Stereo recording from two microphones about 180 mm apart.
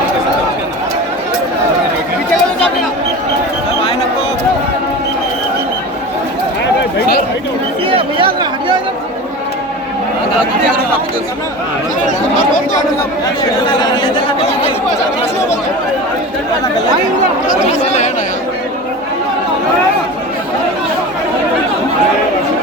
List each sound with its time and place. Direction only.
7.9 s chatter: 30° right (ahead or behind)
13.7 s chatter: 25° left (ahead or behind)
17.5 s chatter: 40° left (ahead or behind)